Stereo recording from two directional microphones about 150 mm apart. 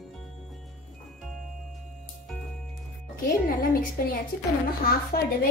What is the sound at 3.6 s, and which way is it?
Speech, 75° left (ahead or behind).